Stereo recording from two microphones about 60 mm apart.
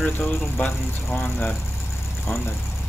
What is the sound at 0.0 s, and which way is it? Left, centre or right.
Speech, left.